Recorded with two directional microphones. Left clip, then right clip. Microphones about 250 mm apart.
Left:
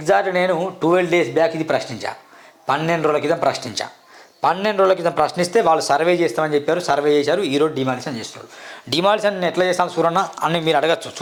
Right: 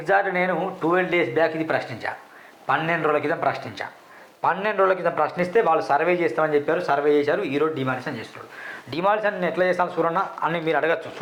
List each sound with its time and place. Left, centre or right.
0.0 s a man's voice: left